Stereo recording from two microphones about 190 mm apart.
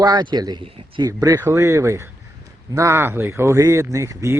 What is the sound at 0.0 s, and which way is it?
Speech, 20° right (ahead or behind).